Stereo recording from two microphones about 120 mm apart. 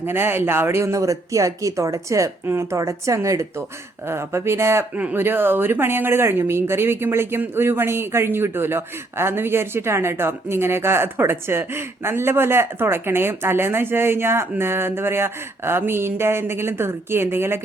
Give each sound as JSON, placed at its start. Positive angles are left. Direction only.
{"t": 0.0, "sound": "speech", "side_deg": -20}